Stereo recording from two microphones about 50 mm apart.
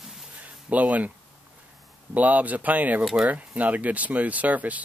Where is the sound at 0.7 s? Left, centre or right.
Right.